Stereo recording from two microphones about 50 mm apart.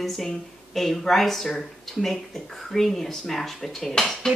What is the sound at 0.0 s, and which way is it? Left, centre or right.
Speech, centre.